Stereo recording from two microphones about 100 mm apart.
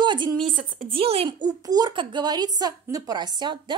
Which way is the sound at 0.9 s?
70° right (ahead or behind).